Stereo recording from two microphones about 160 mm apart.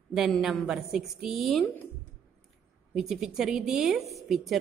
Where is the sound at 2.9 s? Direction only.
Centre (ahead or behind).